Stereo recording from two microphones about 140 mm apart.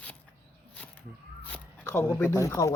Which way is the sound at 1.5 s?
15° left (ahead or behind).